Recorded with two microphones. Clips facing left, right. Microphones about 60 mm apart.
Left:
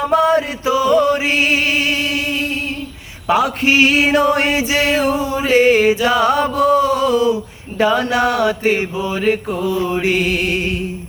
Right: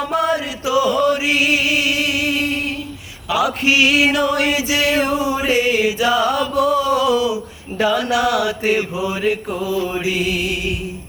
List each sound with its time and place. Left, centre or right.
0.1 s chant: left
3.2 s male singing: left
5.3 s music: centre
5.5 s male singing: left
6.1 s mantra: left
7.8 s male singing: left
9.0 s music: centre
9.6 s mantra: left